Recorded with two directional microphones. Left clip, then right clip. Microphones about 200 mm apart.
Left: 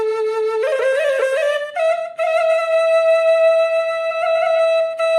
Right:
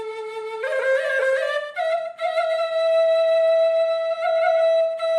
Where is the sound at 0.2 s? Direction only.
15° left (ahead or behind).